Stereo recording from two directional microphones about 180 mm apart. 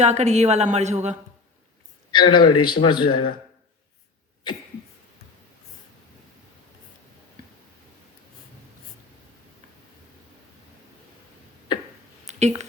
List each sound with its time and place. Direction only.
0.0 s speech: 40° right (ahead or behind)
2.1 s a man's voice: 25° left (ahead or behind)
12.2 s a sound: 40° right (ahead or behind)